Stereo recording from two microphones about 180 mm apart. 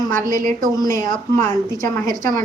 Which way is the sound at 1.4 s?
15° left (ahead or behind).